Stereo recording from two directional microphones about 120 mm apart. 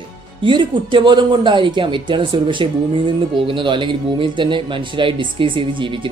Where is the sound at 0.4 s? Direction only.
40° right (ahead or behind).